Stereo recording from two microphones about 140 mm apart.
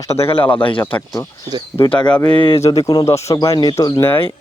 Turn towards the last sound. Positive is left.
turn(degrees=20)  # may be behind; listen again after turning